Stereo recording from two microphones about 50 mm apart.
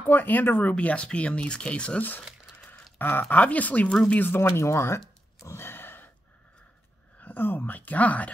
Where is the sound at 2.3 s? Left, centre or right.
Centre.